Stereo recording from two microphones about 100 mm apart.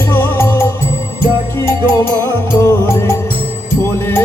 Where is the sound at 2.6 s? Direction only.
25° left (ahead or behind).